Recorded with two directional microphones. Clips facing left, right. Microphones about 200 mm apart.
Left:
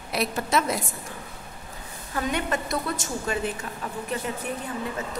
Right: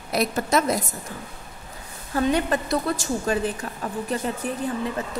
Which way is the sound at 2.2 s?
35° right (ahead or behind).